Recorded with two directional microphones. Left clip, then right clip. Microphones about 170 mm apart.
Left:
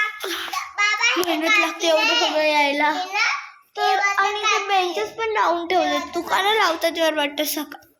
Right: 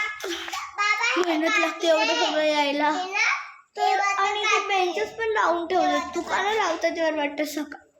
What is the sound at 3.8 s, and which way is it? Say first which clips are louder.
Child singing: left 3 dB; 25° left (ahead or behind).